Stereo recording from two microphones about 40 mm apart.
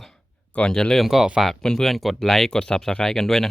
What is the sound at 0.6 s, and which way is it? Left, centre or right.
Speech, centre.